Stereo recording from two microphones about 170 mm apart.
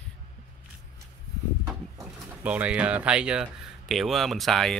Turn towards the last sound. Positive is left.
turn(degrees=0)  # may be behind; listen again after turning